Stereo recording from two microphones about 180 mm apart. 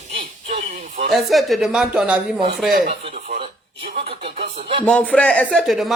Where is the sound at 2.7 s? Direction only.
45° right (ahead or behind).